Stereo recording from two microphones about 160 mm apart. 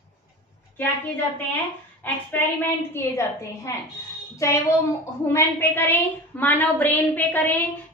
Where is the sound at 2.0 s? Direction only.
10° left (ahead or behind).